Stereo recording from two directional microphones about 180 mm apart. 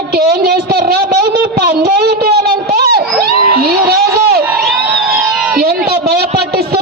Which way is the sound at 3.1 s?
60° right (ahead or behind).